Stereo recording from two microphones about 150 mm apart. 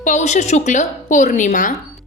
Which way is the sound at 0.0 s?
55° left (ahead or behind).